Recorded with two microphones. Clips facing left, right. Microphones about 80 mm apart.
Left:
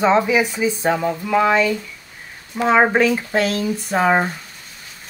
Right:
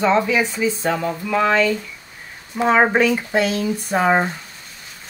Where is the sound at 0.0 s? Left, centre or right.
Centre.